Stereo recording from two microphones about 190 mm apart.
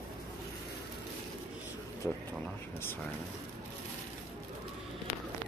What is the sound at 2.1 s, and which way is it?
Speech, 5° left (ahead or behind).